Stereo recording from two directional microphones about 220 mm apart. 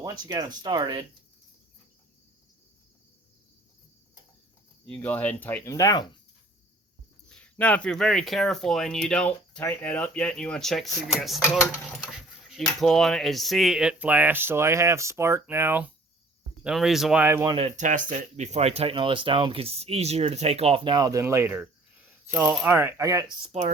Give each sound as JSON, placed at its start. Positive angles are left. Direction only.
{"t": 0.0, "sound": "speech", "side_deg": -15}
{"t": 4.9, "sound": "speech", "side_deg": 5}
{"t": 7.3, "sound": "speech", "side_deg": 5}
{"t": 23.5, "sound": "speech", "side_deg": -30}